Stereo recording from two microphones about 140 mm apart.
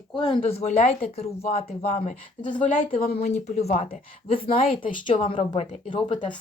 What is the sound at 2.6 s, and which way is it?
Speech, 75° left (ahead or behind).